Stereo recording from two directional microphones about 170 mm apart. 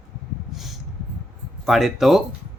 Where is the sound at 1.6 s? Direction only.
Centre (ahead or behind).